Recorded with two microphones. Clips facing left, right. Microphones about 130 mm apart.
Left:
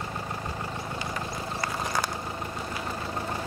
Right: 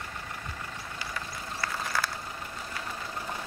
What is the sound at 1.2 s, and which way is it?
Vehicle, 20° left (ahead or behind).